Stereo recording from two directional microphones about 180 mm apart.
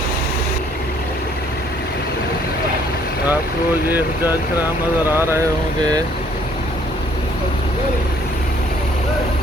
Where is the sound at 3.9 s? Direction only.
10° right (ahead or behind).